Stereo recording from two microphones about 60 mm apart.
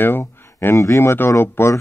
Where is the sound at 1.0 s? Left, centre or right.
Left.